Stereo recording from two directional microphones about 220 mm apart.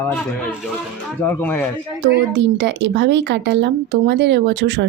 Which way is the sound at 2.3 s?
55° right (ahead or behind).